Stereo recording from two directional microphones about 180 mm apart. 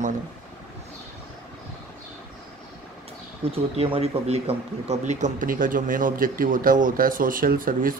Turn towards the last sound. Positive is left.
turn(degrees=-50)  # may be behind; listen again after turning